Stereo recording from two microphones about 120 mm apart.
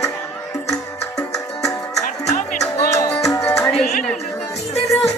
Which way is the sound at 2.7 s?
25° left (ahead or behind).